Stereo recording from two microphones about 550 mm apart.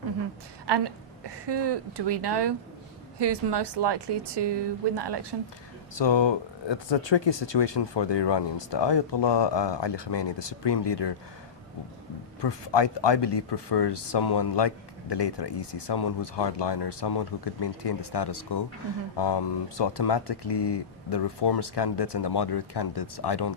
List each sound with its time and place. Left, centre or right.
0.7 s a woman's voice: right
5.9 s speech: left
12.4 s speech: left